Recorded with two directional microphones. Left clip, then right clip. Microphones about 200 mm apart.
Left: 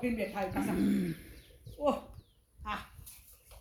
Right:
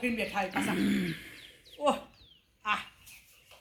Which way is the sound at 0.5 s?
5° left (ahead or behind).